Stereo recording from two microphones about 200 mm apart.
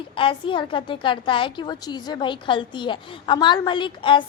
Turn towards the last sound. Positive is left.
turn(degrees=25)  # may be behind; listen again after turning